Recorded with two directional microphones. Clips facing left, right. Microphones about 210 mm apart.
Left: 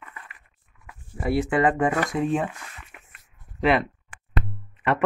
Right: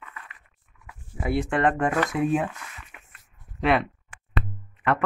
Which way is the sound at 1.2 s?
5° left (ahead or behind).